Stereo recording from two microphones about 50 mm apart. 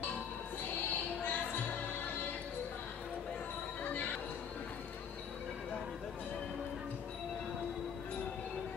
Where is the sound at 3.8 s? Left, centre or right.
Left.